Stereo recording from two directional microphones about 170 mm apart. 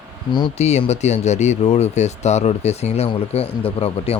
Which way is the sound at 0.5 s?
40° left (ahead or behind).